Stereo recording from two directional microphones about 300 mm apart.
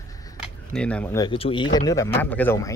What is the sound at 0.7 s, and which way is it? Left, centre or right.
Speech, centre.